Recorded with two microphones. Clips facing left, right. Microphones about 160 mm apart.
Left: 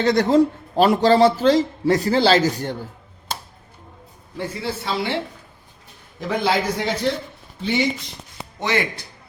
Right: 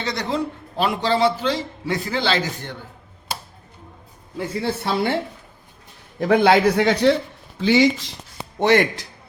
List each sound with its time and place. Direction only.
0.0 s a man's voice: 50° left (ahead or behind)
4.6 s a man's voice: 55° right (ahead or behind)
6.1 s a man's voice: 60° right (ahead or behind)
7.6 s speech: 90° right
8.5 s a man's voice: 60° right (ahead or behind)